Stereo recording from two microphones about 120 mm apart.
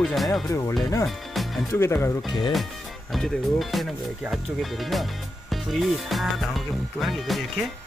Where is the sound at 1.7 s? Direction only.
20° left (ahead or behind).